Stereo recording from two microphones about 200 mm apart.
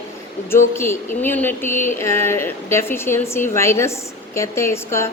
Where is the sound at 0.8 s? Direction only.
10° left (ahead or behind).